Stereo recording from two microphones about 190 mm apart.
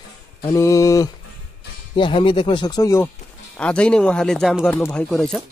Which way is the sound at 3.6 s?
5° left (ahead or behind).